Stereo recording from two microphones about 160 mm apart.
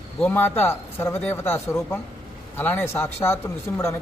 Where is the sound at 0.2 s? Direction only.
10° left (ahead or behind).